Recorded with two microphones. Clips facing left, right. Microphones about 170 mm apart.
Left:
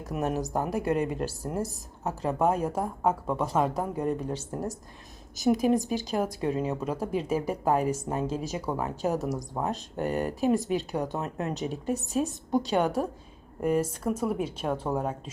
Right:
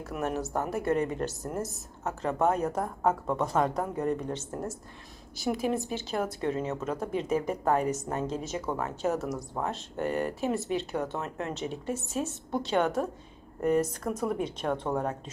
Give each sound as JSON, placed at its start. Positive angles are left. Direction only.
{"t": 0.0, "sound": "a woman's voice", "side_deg": 15}